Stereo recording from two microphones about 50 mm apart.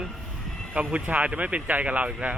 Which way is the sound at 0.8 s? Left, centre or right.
Right.